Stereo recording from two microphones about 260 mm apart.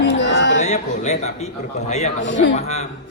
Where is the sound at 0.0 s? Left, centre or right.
Left.